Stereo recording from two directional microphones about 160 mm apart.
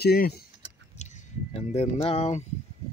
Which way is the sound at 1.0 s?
45° left (ahead or behind).